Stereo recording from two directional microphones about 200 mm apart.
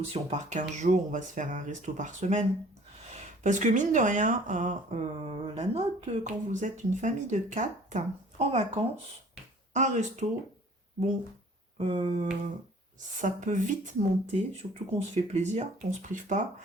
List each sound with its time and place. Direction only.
0.1 s speech: 35° right (ahead or behind)
11.8 s speech: 30° right (ahead or behind)